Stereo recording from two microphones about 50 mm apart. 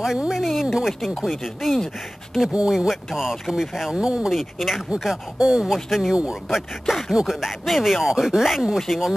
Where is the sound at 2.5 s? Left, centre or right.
Centre.